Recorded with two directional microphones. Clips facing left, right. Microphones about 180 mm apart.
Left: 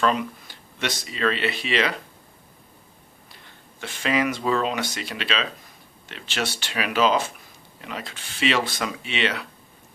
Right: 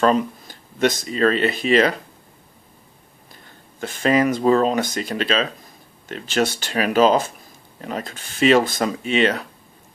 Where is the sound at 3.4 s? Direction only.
45° right (ahead or behind).